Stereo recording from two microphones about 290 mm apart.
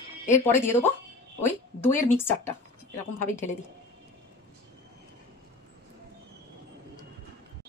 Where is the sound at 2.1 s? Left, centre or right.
Centre.